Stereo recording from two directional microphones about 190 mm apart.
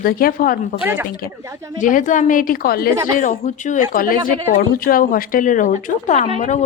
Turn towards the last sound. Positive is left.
turn(degrees=40)  # may be behind; listen again after turning